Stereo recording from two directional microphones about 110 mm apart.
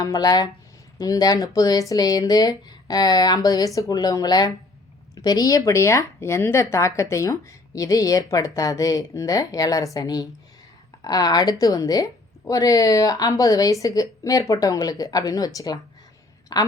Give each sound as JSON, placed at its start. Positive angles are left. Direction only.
{"t": 0.0, "sound": "speech", "side_deg": 35}